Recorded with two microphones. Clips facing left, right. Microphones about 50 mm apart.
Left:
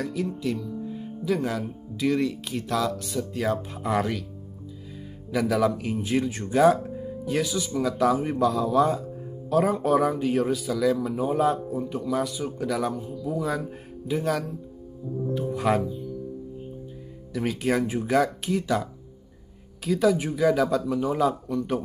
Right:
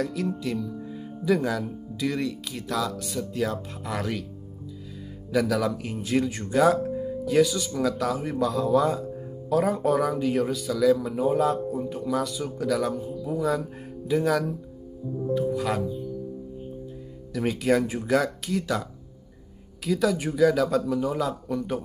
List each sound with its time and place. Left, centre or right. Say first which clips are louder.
0.0 s speech: even; centre
3.7 s speech: left 5 dB; left
5.3 s speech: left 1 dB; centre
5.8 s speech: even; centre
8.5 s speech: left 1 dB; centre
12.2 s speech: left 1 dB; centre
12.9 s speech: even; centre
15.3 s speech: left 1 dB; left
17.6 s speech: right 2 dB; centre
19.8 s speech: left 2 dB; centre